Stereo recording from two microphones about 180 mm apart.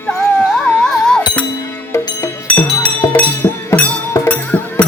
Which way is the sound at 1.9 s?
15° left (ahead or behind).